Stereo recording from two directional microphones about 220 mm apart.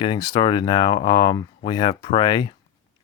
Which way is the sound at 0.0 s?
20° left (ahead or behind).